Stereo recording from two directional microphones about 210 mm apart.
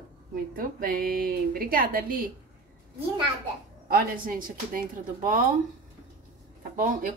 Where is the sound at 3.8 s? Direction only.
45° right (ahead or behind).